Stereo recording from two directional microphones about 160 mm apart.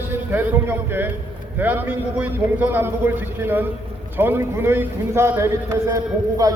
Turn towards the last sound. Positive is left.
turn(degrees=-20)  # may be behind; listen again after turning